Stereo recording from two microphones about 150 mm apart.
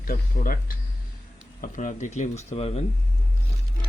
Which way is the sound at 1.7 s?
55° left (ahead or behind).